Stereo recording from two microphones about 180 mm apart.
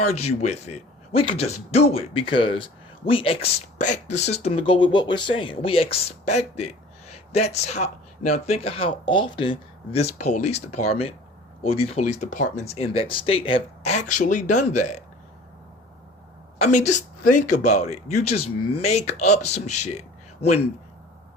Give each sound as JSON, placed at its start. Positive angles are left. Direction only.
{"t": 0.1, "sound": "speech", "side_deg": 35}
{"t": 3.8, "sound": "speech", "side_deg": 40}
{"t": 16.6, "sound": "speech", "side_deg": 40}